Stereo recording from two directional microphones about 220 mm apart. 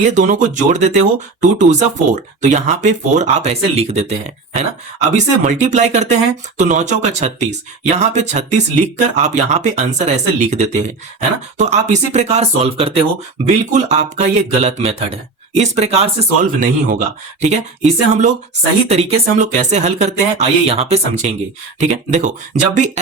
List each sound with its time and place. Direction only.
0.0 s speech: 35° right (ahead or behind)